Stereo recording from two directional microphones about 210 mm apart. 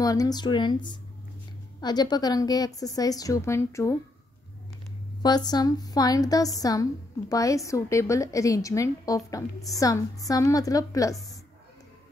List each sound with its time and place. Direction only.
0.0 s speech: 15° left (ahead or behind)
1.8 s a woman's voice: 20° left (ahead or behind)
5.2 s a woman's voice: 20° left (ahead or behind)